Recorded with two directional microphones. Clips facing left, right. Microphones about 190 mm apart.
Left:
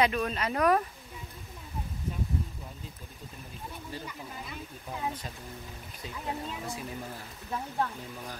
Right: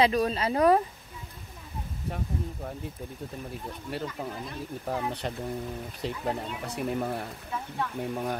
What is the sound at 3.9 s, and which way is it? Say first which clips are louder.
Speech: right 10 dB; 70° right (ahead or behind).